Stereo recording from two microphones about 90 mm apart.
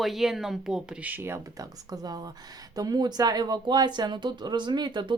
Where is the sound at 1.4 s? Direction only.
40° right (ahead or behind).